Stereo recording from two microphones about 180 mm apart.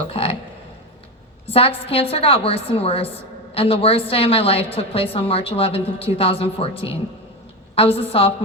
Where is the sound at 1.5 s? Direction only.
30° left (ahead or behind).